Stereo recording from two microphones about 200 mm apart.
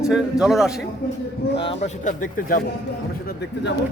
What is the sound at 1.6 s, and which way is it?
Speech, 30° left (ahead or behind).